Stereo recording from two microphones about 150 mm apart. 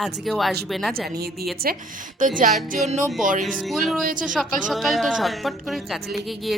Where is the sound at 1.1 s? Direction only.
90° right.